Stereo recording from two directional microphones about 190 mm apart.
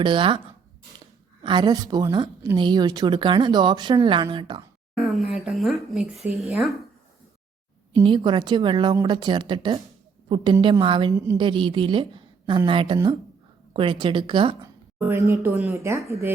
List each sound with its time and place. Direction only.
0.0 s a woman's voice: 25° right (ahead or behind)
4.9 s a sound: centre (ahead or behind)
6.5 s speech: centre (ahead or behind)
7.9 s a woman's voice: 25° right (ahead or behind)
14.9 s speech: 10° right (ahead or behind)